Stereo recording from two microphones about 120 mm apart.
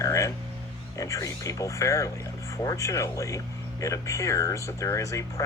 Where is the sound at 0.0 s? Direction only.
25° left (ahead or behind).